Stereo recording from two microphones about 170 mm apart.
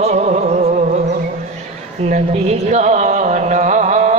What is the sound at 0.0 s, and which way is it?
Music, 40° right (ahead or behind).